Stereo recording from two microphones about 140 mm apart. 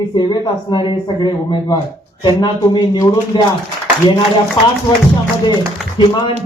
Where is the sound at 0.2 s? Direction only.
35° left (ahead or behind).